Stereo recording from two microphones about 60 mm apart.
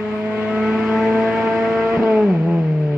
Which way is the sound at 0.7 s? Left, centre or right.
Centre.